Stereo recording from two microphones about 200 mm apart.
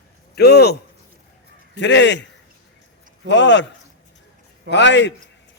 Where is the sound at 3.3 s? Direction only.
65° left (ahead or behind).